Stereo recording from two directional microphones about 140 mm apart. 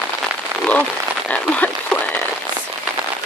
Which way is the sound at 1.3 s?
10° left (ahead or behind).